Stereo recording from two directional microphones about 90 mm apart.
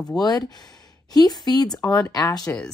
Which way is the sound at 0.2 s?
45° left (ahead or behind).